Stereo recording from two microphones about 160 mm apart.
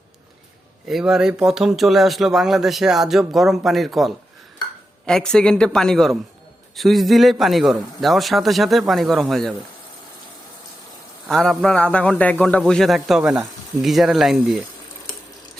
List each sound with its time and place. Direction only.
0.9 s a man's voice: centre (ahead or behind)
11.3 s a man's voice: centre (ahead or behind)